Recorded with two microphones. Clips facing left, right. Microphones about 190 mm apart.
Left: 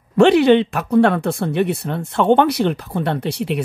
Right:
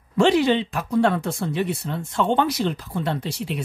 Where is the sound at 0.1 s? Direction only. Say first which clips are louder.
Left 6 dB; 65° left (ahead or behind).